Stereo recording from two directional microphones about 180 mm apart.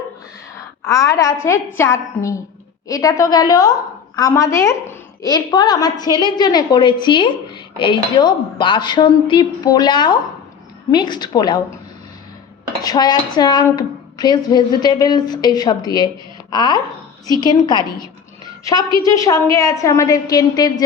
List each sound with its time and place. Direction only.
0.9 s a woman's voice: 20° left (ahead or behind)
12.8 s a woman's voice: 20° left (ahead or behind)